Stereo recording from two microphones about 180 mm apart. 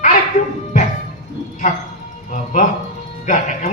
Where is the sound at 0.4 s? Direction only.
35° left (ahead or behind).